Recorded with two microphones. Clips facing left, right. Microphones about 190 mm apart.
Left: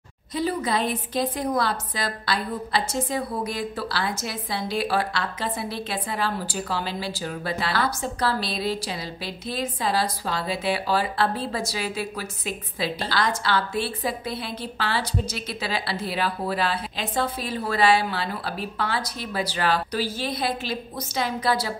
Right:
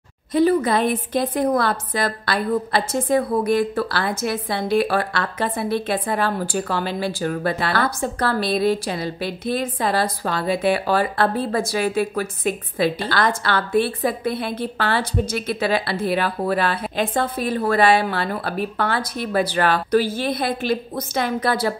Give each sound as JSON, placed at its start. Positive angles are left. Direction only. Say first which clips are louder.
{"t": 0.3, "sound": "a woman's voice", "louder": "right 8 dB", "side_deg": -55}